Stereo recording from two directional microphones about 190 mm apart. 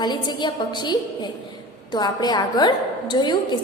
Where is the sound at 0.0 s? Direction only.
25° left (ahead or behind).